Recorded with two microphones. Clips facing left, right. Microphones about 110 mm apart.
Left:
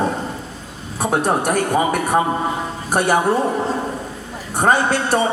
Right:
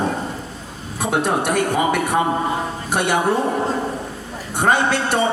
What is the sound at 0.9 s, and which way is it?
A woman's voice, 40° left (ahead or behind).